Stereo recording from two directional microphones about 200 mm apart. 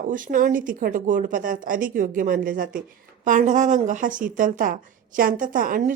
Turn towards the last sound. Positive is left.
turn(degrees=-45)  # may be behind; listen again after turning